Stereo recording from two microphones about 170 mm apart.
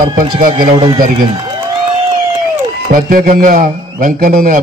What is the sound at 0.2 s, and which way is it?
Speech, 30° right (ahead or behind).